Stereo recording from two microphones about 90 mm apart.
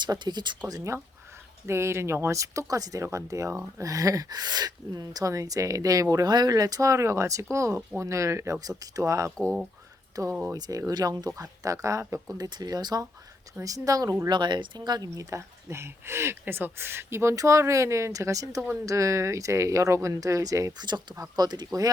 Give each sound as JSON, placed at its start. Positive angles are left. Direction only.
{"t": 0.0, "sound": "speech", "side_deg": -55}
{"t": 1.6, "sound": "speech", "side_deg": -30}
{"t": 12.4, "sound": "speech", "side_deg": -50}
{"t": 14.3, "sound": "speech", "side_deg": -55}
{"t": 20.7, "sound": "speech", "side_deg": -55}